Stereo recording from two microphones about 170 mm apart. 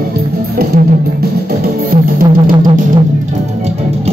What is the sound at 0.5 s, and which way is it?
Music, 65° right (ahead or behind).